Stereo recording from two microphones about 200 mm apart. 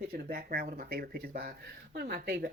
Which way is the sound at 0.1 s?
50° right (ahead or behind).